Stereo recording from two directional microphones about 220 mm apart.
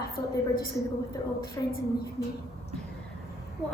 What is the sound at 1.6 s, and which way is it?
Speech, 15° left (ahead or behind).